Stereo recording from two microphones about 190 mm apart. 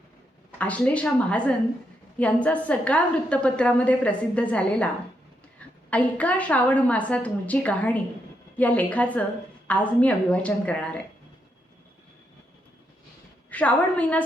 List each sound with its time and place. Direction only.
0.6 s a woman's voice: 10° left (ahead or behind)
13.5 s a woman's voice: 5° left (ahead or behind)